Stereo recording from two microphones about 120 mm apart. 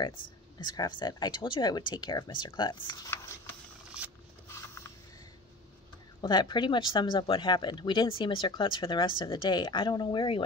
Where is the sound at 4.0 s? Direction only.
10° right (ahead or behind).